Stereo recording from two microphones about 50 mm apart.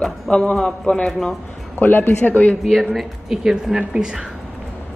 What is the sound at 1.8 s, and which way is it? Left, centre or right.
Speech, left.